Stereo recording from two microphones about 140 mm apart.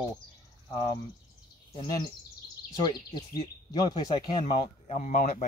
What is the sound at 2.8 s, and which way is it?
Speech, 35° left (ahead or behind).